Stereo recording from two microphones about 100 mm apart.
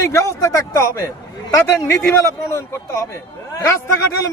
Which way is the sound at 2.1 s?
30° left (ahead or behind).